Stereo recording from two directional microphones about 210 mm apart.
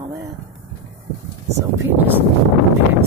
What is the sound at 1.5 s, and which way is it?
Speech, 15° right (ahead or behind).